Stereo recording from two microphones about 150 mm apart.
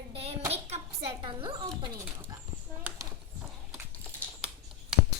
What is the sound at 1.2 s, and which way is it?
Speech, 30° right (ahead or behind).